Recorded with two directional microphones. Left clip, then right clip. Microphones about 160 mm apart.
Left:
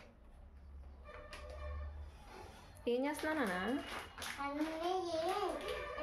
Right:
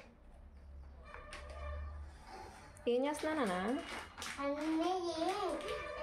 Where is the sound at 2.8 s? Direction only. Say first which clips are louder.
Right 2 dB; 10° right (ahead or behind).